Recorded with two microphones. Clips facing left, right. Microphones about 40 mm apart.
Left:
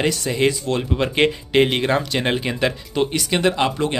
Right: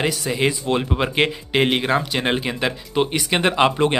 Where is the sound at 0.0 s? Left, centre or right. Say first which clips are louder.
Left 1 dB; centre.